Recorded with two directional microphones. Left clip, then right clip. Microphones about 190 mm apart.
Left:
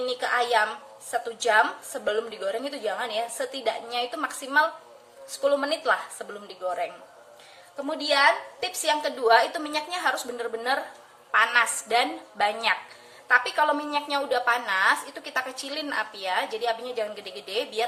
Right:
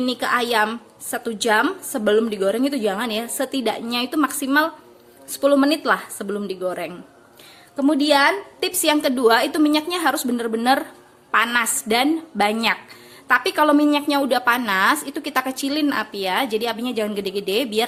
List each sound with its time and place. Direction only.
0.0 s a woman's voice: 50° right (ahead or behind)